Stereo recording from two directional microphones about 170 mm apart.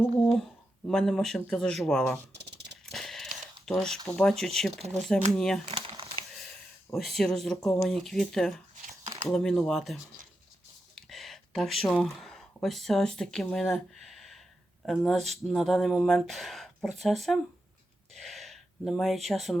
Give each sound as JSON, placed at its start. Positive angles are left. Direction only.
{"t": 0.9, "sound": "speech", "side_deg": 5}
{"t": 2.3, "sound": "a sound", "side_deg": -90}
{"t": 2.8, "sound": "a sound", "side_deg": 0}
{"t": 3.7, "sound": "speech", "side_deg": 0}
{"t": 5.6, "sound": "crumpling", "side_deg": -30}
{"t": 6.9, "sound": "speech", "side_deg": 0}
{"t": 18.1, "sound": "gasp", "side_deg": 0}